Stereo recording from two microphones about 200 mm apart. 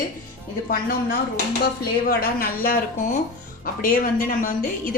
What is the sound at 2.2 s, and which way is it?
A woman's voice, 45° left (ahead or behind).